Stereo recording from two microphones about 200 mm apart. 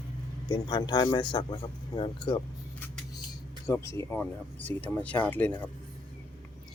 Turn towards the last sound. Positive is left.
turn(degrees=10)  # may be behind; listen again after turning